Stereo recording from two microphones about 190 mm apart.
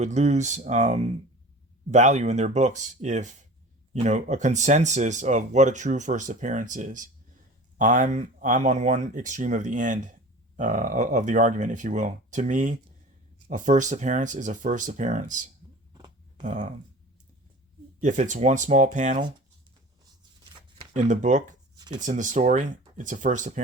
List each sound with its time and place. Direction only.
0.0 s speech: 35° right (ahead or behind)
18.0 s speech: 40° right (ahead or behind)
20.9 s speech: 40° right (ahead or behind)
21.8 s a sound: 20° right (ahead or behind)
22.0 s speech: 40° right (ahead or behind)